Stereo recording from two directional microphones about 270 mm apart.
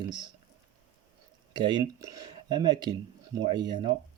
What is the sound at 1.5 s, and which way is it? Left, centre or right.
Speech, centre.